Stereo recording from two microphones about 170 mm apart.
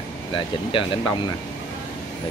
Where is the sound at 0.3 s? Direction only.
30° left (ahead or behind).